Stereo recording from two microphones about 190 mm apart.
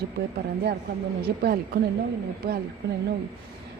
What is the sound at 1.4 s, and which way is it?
Speech, 55° right (ahead or behind).